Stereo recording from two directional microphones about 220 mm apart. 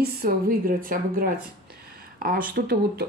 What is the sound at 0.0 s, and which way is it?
Speech, 40° right (ahead or behind).